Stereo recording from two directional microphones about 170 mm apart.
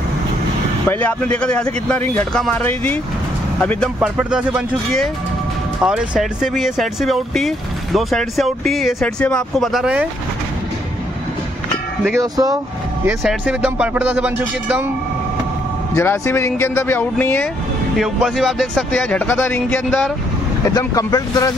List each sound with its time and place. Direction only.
0.8 s speech: 10° left (ahead or behind)
4.0 s speech: 5° right (ahead or behind)
12.2 s speech: 20° right (ahead or behind)
13.2 s speech: 5° right (ahead or behind)
15.9 s speech: 15° left (ahead or behind)
17.9 s speech: centre (ahead or behind); by 21.5 s 20° left (ahead or behind)